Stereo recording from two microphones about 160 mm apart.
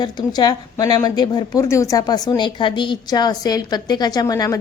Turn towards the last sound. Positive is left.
turn(degrees=20)  # may be behind; listen again after turning